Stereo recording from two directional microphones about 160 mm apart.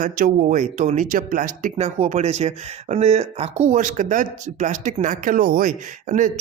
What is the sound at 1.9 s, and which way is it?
Speech, 45° right (ahead or behind).